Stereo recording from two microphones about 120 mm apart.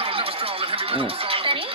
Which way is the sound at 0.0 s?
50° right (ahead or behind).